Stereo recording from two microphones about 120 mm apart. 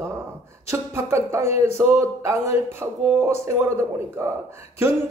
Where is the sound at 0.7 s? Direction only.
25° right (ahead or behind).